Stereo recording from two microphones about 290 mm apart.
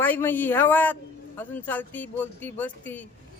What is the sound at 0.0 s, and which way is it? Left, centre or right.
A man's voice, centre.